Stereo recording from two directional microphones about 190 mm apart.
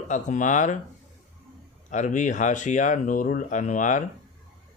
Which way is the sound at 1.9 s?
40° left (ahead or behind).